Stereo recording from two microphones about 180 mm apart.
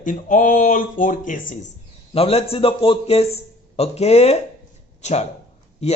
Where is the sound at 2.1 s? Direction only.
35° left (ahead or behind).